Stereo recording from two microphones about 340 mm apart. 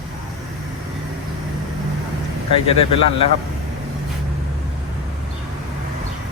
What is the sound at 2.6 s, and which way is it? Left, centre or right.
Speech, centre.